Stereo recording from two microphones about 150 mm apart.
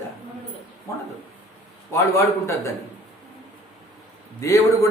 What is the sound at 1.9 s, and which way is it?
Speech, 20° left (ahead or behind).